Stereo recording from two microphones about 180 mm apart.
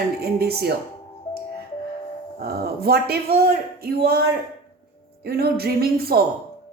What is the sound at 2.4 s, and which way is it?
A woman's voice, 60° right (ahead or behind).